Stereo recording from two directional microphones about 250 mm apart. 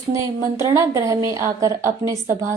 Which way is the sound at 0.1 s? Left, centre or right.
Centre.